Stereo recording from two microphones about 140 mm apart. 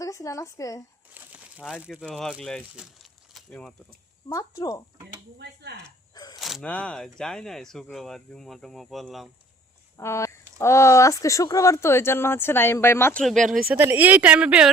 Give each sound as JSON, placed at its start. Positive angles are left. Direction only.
{"t": 0.0, "sound": "speech", "side_deg": 25}
{"t": 1.1, "sound": "crumpling", "side_deg": -10}
{"t": 2.0, "sound": "speech", "side_deg": 0}
{"t": 2.7, "sound": "a sound", "side_deg": 0}
{"t": 4.3, "sound": "speech", "side_deg": 25}
{"t": 6.1, "sound": "a sound", "side_deg": 30}
{"t": 6.4, "sound": "a sound", "side_deg": 0}
{"t": 6.7, "sound": "speech", "side_deg": 10}
{"t": 10.0, "sound": "speech", "side_deg": 20}
{"t": 13.7, "sound": "a woman's voice", "side_deg": -15}